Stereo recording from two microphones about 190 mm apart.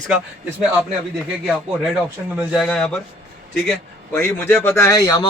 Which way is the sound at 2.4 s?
Centre (ahead or behind).